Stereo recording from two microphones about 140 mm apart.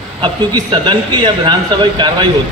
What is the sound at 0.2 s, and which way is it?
A man's voice, 35° right (ahead or behind).